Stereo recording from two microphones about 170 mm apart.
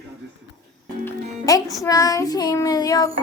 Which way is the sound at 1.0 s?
15° left (ahead or behind).